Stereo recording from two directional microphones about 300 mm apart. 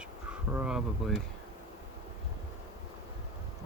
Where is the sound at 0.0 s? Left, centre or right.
Centre.